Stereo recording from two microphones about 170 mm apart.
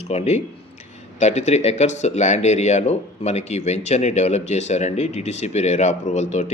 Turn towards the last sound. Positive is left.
turn(degrees=40)  # may be behind; listen again after turning